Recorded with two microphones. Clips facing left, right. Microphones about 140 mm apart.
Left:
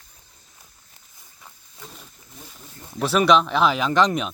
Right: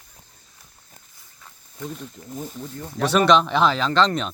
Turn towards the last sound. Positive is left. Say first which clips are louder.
# even
turn(degrees=10)  # may be behind; listen again after turning